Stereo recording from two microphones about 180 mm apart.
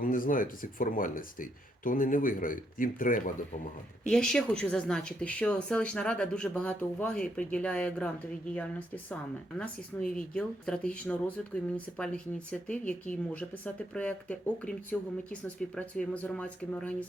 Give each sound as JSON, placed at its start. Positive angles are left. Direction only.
{"t": 0.0, "sound": "speech", "side_deg": 50}
{"t": 4.1, "sound": "speech", "side_deg": 5}